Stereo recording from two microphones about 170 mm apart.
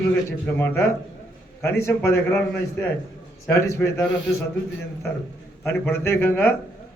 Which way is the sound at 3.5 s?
15° left (ahead or behind).